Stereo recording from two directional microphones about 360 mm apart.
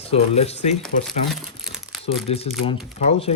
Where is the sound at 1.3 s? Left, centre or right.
Centre.